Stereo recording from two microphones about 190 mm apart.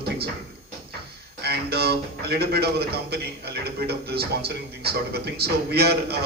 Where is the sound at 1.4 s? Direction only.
55° right (ahead or behind).